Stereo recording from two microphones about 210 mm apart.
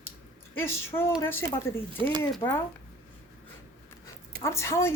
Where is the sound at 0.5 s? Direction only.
10° left (ahead or behind).